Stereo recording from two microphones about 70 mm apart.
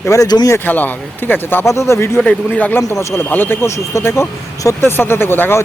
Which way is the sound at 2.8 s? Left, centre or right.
Left.